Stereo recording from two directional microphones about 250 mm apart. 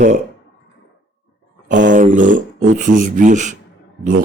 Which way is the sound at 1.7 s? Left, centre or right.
Right.